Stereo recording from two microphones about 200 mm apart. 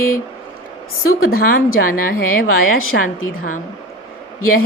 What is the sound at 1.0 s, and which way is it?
Speech, 90° left.